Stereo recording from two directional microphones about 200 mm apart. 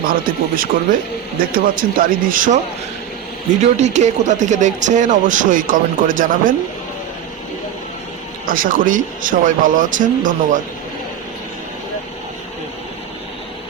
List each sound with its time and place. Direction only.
0.0 s speech: 45° right (ahead or behind)
3.6 s speech: 35° right (ahead or behind)
8.4 s speech: 45° right (ahead or behind)